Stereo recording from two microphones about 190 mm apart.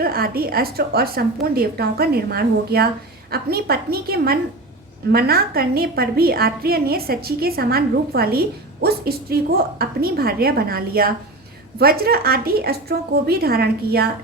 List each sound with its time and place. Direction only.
0.0 s a woman's voice: 50° right (ahead or behind)